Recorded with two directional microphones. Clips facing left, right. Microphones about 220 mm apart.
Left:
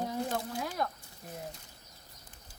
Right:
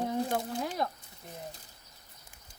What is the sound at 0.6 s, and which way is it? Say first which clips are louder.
Speech: right 2 dB; 25° right (ahead or behind).